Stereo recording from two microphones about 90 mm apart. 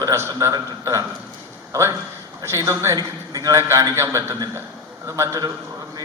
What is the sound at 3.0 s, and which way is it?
Speech, 45° right (ahead or behind).